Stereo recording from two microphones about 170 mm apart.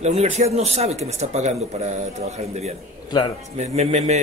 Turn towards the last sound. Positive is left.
turn(degrees=-40)  # may be behind; listen again after turning